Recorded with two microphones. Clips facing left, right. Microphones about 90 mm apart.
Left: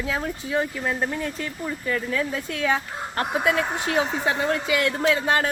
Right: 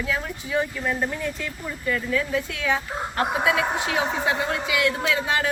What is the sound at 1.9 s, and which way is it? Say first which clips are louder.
Speech: right 2 dB; 35° left (ahead or behind).